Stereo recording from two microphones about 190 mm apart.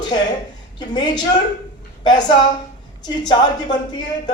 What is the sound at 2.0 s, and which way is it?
A woman's voice, 25° left (ahead or behind).